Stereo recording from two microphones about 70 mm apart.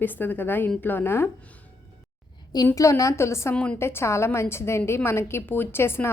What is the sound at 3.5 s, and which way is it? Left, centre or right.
Speech, centre.